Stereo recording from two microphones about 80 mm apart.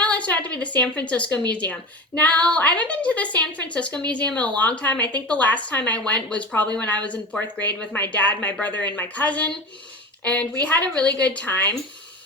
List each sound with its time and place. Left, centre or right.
0.0 s a woman's voice: centre